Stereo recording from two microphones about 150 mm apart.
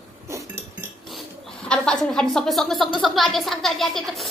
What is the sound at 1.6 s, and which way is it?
A woman's voice, 5° left (ahead or behind).